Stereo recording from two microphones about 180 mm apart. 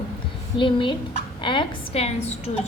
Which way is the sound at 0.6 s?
25° left (ahead or behind).